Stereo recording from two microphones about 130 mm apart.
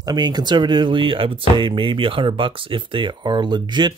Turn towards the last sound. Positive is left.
turn(degrees=-35)  # may be behind; listen again after turning